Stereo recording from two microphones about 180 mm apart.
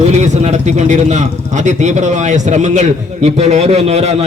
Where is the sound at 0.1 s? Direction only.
40° right (ahead or behind).